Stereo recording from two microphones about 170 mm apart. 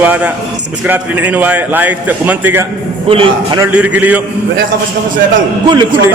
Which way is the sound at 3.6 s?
5° right (ahead or behind).